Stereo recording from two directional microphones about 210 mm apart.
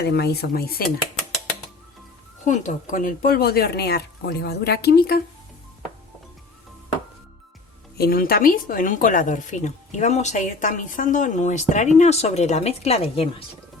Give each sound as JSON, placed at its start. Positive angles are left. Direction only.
{"t": 0.0, "sound": "speech", "side_deg": 50}
{"t": 2.4, "sound": "speech", "side_deg": 35}
{"t": 7.9, "sound": "speech", "side_deg": 45}